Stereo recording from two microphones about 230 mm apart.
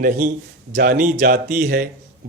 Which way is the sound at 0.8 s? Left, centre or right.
Right.